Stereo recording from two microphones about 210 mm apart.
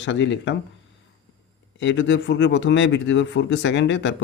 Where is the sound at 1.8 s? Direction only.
60° left (ahead or behind).